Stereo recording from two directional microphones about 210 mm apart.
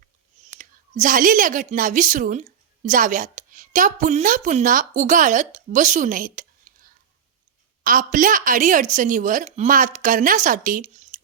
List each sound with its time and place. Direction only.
0.6 s a woman's voice: 40° right (ahead or behind)
6.7 s whispering: 35° right (ahead or behind)
7.9 s a woman's voice: 40° right (ahead or behind)